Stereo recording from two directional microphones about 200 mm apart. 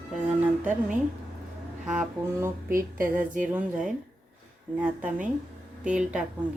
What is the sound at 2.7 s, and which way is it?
Speech, 45° right (ahead or behind).